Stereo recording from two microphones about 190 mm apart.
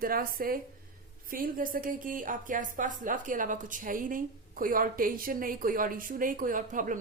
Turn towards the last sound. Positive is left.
turn(degrees=-45)  # may be behind; listen again after turning